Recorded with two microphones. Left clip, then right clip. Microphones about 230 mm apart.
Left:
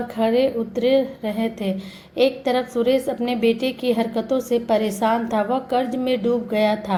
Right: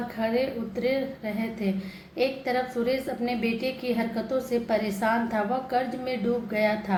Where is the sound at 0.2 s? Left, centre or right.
Left.